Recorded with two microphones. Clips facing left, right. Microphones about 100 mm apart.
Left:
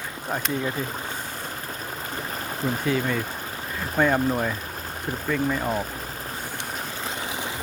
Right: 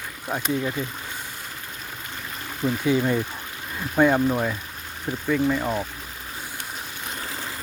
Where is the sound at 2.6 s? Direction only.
40° left (ahead or behind).